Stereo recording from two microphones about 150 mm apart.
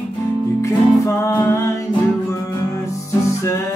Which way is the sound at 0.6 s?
20° left (ahead or behind).